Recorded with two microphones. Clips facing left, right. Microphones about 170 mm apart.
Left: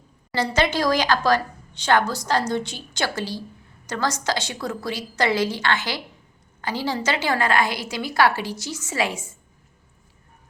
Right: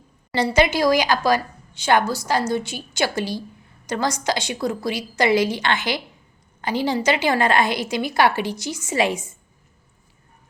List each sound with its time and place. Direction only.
0.3 s a woman's voice: 10° right (ahead or behind)